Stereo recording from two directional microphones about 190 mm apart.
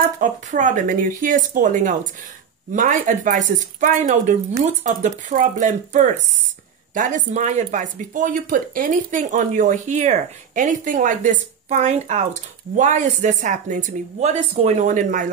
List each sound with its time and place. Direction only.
0.2 s speech: 40° right (ahead or behind)